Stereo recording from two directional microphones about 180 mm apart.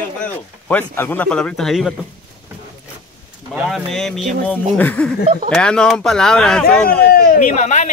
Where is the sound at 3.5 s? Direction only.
5° right (ahead or behind).